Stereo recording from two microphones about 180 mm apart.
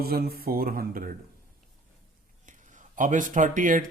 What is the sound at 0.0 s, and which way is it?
Speech, 60° right (ahead or behind).